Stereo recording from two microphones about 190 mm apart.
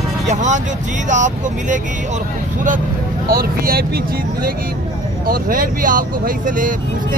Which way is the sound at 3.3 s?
50° right (ahead or behind).